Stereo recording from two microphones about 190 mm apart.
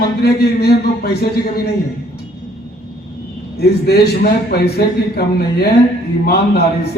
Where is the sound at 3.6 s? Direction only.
55° left (ahead or behind).